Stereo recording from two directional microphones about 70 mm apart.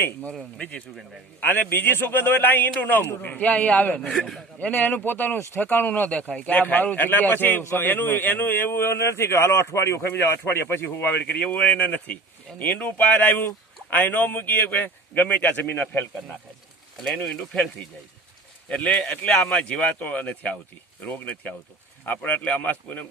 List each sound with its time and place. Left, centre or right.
1.4 s a man's voice: left
4.2 s speech: centre
4.6 s a man's voice: left
17.2 s speech: centre
18.7 s a man's voice: centre